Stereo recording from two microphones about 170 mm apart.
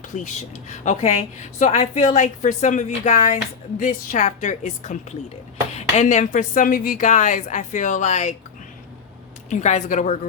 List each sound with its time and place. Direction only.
0.1 s a woman's voice: 45° left (ahead or behind)
9.5 s a woman's voice: 45° left (ahead or behind)